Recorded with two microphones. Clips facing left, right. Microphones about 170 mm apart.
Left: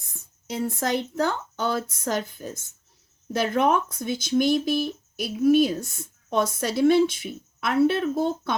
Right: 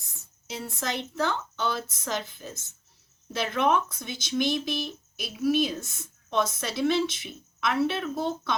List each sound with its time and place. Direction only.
0.0 s a woman's voice: 50° left (ahead or behind)